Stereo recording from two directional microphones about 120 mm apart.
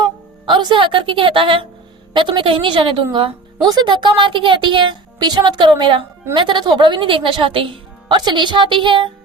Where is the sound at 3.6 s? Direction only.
35° right (ahead or behind).